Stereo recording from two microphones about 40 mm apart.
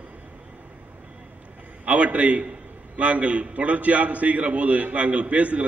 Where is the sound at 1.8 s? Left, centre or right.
Right.